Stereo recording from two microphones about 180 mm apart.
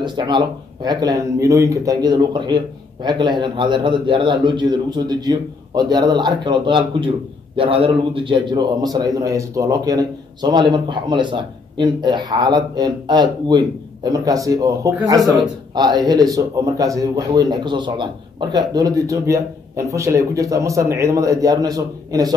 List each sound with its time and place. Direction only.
0.0 s speech: 25° right (ahead or behind)